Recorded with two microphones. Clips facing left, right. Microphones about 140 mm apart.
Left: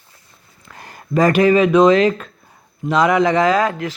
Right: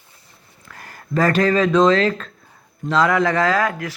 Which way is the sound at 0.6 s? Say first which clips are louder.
Left 2 dB; 20° left (ahead or behind).